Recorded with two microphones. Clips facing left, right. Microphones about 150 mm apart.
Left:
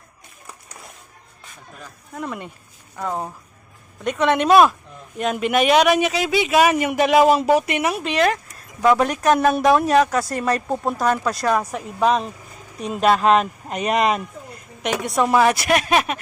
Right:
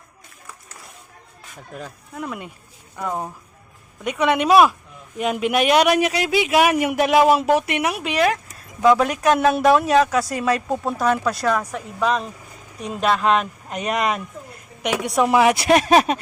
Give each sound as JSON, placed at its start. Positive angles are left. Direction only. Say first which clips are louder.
{"t": 2.1, "sound": "a man's voice", "louder": "left 1 dB", "side_deg": -5}
{"t": 4.0, "sound": "a man's voice", "louder": "left 1 dB", "side_deg": -10}
{"t": 10.8, "sound": "speech", "louder": "left 1 dB", "side_deg": 10}
{"t": 11.1, "sound": "a man's voice", "louder": "even", "side_deg": 0}
{"t": 14.9, "sound": "speech", "louder": "right 1 dB", "side_deg": -10}
{"t": 15.6, "sound": "speech", "louder": "right 4 dB", "side_deg": -30}